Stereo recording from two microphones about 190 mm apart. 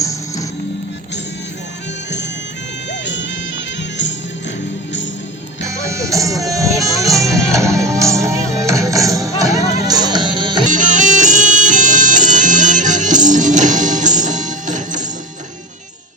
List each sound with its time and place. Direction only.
0.0 s music: 15° left (ahead or behind)
2.9 s music: 75° left (ahead or behind)
5.6 s music: 15° right (ahead or behind)
10.7 s bagpipes: 40° right (ahead or behind)